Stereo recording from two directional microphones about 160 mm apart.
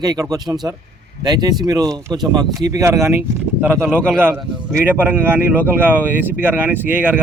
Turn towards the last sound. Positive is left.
turn(degrees=-10)  # may be behind; listen again after turning